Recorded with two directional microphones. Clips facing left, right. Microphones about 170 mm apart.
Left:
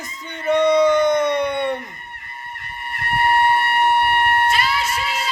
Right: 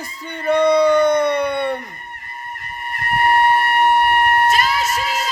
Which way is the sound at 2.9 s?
45° right (ahead or behind).